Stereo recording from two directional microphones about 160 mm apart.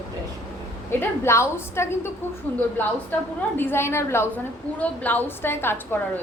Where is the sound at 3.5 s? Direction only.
15° left (ahead or behind).